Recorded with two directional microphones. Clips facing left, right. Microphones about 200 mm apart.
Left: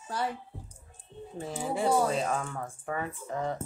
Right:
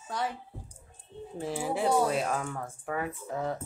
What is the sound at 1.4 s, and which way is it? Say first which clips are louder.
Speech: right 1 dB; centre (ahead or behind).